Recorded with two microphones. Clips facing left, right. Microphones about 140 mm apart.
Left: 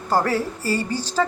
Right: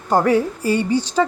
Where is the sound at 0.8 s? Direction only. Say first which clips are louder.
Right 7 dB; 40° left (ahead or behind).